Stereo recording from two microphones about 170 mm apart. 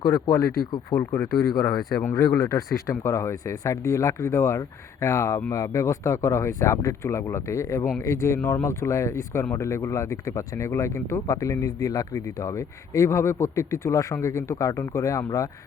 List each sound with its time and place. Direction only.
0.0 s speech: 20° left (ahead or behind)